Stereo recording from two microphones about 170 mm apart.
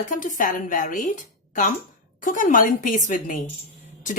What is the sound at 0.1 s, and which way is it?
A woman's voice, 50° left (ahead or behind).